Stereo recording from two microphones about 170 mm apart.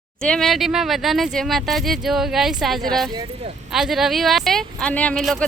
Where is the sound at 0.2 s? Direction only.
5° left (ahead or behind).